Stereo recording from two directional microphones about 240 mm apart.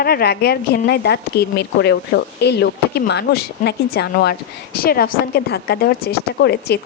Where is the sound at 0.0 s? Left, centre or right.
Left.